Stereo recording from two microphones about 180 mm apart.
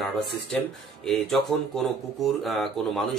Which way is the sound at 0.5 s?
5° left (ahead or behind).